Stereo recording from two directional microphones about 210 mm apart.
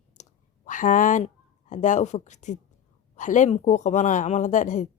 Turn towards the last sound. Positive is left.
turn(degrees=35)  # may be behind; listen again after turning